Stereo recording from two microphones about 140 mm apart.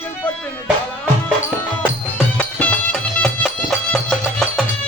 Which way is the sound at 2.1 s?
10° left (ahead or behind).